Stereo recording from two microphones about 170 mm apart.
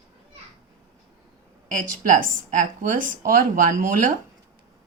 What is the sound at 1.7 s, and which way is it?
Speech, 50° right (ahead or behind).